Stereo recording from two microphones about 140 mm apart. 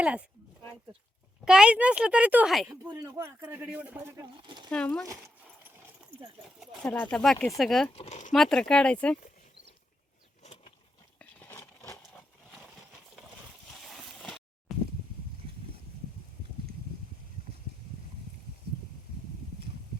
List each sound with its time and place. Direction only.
0.0 s speech: 10° right (ahead or behind)
1.5 s speech: 5° right (ahead or behind)
2.9 s a man's voice: 20° right (ahead or behind)
4.2 s speech: 30° right (ahead or behind)
4.7 s speech: 5° left (ahead or behind)
6.8 s speech: 10° left (ahead or behind)
7.9 s speech: 45° left (ahead or behind)
8.3 s speech: 5° left (ahead or behind)
10.4 s a sound: 50° left (ahead or behind)
11.2 s a sound: 15° left (ahead or behind)
13.8 s a sound: centre (ahead or behind)